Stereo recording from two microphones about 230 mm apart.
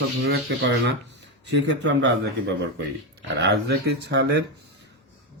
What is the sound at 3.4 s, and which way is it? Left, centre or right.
Speech, right.